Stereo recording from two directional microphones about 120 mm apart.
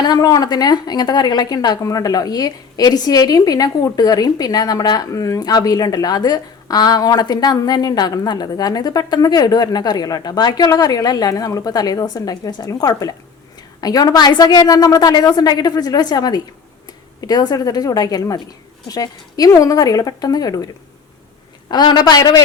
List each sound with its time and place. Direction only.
0.0 s a woman's voice: 35° left (ahead or behind)
21.7 s a woman's voice: 35° left (ahead or behind)